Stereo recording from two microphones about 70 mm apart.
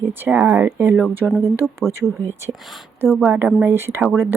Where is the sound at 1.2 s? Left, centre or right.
Centre.